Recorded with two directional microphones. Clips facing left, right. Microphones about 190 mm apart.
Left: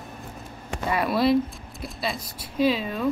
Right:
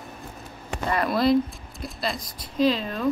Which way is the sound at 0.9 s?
5° left (ahead or behind).